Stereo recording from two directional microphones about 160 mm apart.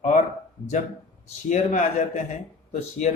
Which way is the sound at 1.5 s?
50° left (ahead or behind).